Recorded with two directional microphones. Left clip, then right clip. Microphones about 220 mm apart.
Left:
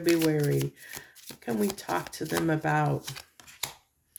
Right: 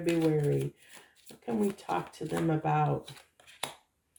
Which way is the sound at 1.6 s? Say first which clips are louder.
Left 1 dB; 45° left (ahead or behind).